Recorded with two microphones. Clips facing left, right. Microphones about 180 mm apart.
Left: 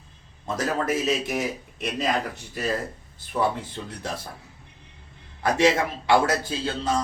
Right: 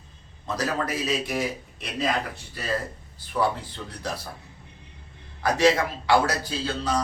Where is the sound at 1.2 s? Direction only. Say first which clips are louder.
Even; 20° left (ahead or behind).